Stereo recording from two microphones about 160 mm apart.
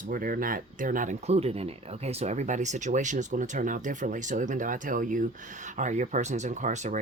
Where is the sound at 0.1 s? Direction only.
60° right (ahead or behind).